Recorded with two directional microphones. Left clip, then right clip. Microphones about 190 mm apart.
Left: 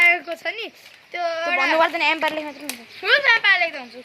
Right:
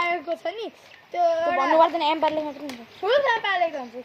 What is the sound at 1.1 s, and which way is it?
Speech, 10° right (ahead or behind).